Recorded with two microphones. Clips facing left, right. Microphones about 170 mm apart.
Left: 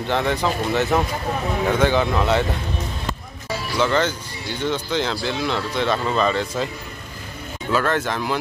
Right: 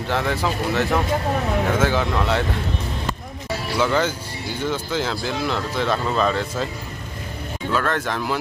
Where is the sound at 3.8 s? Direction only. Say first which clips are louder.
Left 1 dB; 10° right (ahead or behind).